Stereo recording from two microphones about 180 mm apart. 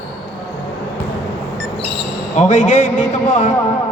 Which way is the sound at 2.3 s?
40° left (ahead or behind).